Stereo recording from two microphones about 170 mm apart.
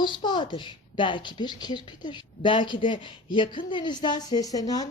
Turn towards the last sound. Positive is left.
turn(degrees=20)  # may be behind; listen again after turning